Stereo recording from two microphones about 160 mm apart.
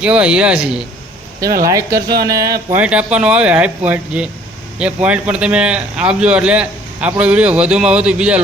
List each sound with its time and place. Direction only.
0.0 s speech: 5° right (ahead or behind)
1.6 s speech: 20° right (ahead or behind)
2.7 s a man's voice: 5° right (ahead or behind)